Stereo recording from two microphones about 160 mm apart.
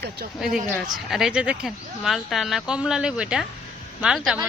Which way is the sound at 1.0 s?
Centre (ahead or behind).